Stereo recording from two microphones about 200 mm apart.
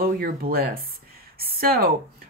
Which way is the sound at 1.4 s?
50° right (ahead or behind).